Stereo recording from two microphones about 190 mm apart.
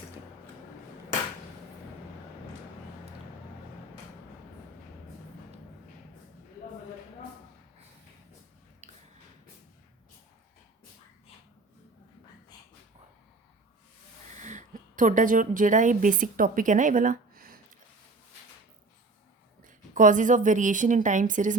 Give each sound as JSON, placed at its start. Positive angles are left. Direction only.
{"t": 14.4, "sound": "a woman's voice", "side_deg": -40}
{"t": 19.6, "sound": "a woman's voice", "side_deg": -45}